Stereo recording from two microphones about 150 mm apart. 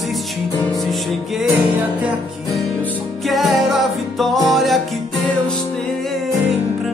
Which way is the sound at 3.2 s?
Centre (ahead or behind).